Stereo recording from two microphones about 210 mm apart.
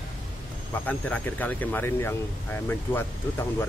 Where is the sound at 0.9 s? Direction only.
10° left (ahead or behind).